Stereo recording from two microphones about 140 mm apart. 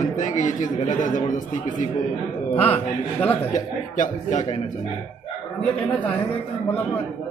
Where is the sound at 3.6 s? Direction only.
65° left (ahead or behind).